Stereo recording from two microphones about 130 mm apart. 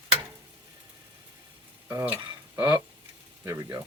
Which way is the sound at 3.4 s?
25° right (ahead or behind).